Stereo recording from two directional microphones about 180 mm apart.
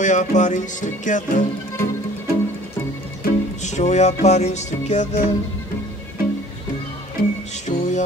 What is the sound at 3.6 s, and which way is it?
Music, 40° left (ahead or behind).